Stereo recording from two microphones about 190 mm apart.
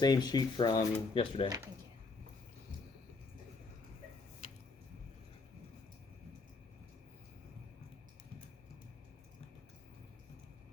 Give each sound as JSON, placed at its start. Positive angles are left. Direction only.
{"t": 0.0, "sound": "speech", "side_deg": 20}
{"t": 1.5, "sound": "speech", "side_deg": -20}